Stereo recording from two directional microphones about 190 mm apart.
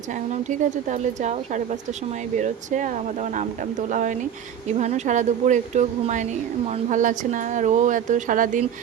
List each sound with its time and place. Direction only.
0.1 s speech: 40° right (ahead or behind)